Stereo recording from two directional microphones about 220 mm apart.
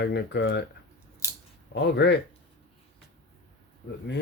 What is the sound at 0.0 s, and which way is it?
Speech, 50° left (ahead or behind).